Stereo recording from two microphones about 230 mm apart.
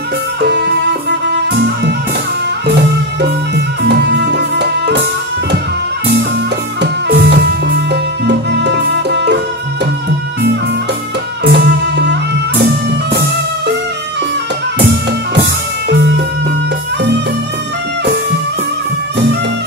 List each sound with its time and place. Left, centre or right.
1.3 s music: right
3.2 s music: right
6.8 s music: right
11.4 s music: right
15.9 s music: right